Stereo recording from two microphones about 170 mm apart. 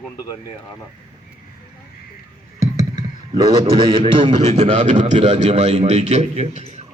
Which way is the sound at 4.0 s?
35° right (ahead or behind).